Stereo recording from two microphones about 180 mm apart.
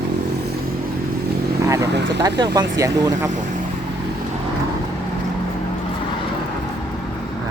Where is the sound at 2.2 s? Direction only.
20° right (ahead or behind).